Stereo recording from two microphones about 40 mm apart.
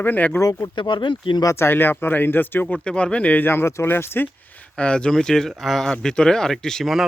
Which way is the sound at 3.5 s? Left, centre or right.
Left.